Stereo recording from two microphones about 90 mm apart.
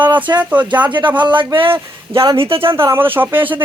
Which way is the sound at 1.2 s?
60° right (ahead or behind).